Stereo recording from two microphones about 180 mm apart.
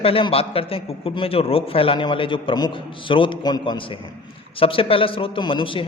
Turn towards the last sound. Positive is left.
turn(degrees=30)  # may be behind; listen again after turning